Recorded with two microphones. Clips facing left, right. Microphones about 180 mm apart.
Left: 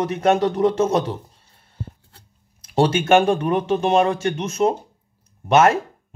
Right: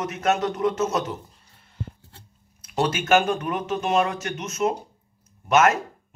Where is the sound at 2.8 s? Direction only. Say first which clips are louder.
Left 5 dB; 30° left (ahead or behind).